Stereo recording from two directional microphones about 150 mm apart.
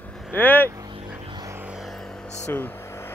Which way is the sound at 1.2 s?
35° right (ahead or behind).